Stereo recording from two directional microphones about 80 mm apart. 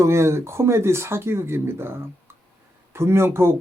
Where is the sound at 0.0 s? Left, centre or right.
Right.